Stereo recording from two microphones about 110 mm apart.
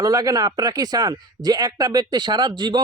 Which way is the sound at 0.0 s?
35° right (ahead or behind).